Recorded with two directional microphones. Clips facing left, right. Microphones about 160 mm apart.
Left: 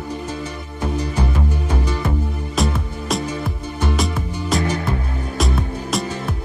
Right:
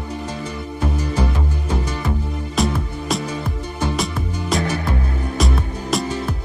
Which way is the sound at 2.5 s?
Centre (ahead or behind).